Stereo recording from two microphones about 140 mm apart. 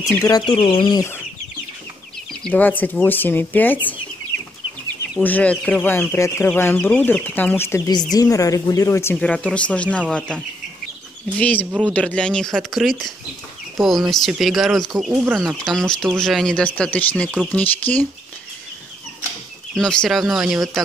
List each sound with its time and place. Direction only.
0.3 s speech: 35° left (ahead or behind)
2.4 s speech: 10° left (ahead or behind)
5.2 s speech: 10° left (ahead or behind)
9.1 s speech: 10° left (ahead or behind); by 15.4 s 10° right (ahead or behind)
15.4 s speech: 5° left (ahead or behind)
19.7 s speech: 5° left (ahead or behind)